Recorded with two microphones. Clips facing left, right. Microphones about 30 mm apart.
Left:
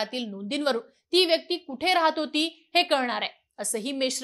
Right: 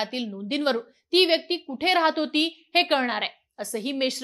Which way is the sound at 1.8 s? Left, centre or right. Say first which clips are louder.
Right 1 dB; right.